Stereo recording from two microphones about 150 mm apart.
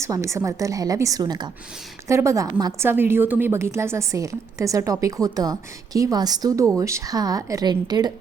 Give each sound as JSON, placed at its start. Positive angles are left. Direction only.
{"t": 0.0, "sound": "a woman's voice", "side_deg": -20}